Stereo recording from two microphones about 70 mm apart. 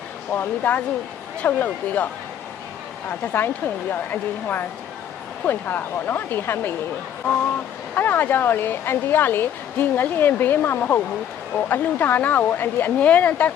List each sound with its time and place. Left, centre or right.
0.3 s speech: left
3.1 s speech: left
7.9 s speech: left